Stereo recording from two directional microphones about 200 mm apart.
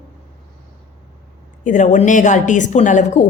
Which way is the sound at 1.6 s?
40° left (ahead or behind).